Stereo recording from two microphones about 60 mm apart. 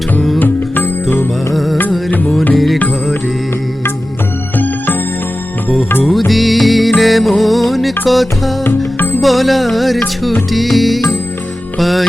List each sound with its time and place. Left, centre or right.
0.3 s music: left
1.5 s music: centre
2.0 s music: left
4.5 s music: left
6.1 s music: centre
8.6 s music: left
9.2 s music: centre